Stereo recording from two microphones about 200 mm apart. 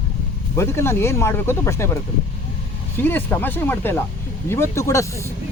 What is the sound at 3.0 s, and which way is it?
Speech, 10° left (ahead or behind).